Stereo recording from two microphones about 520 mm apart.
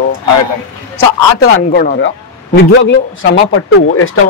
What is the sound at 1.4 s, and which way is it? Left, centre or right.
Speech, centre.